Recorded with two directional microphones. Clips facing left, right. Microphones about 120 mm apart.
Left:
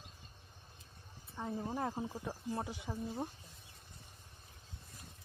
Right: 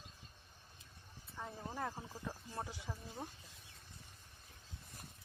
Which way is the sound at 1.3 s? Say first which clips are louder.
Left 6 dB; 20° left (ahead or behind).